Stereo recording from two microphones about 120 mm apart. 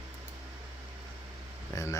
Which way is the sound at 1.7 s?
25° left (ahead or behind).